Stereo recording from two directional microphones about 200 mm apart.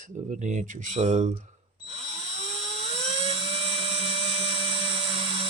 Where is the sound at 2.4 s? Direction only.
30° right (ahead or behind).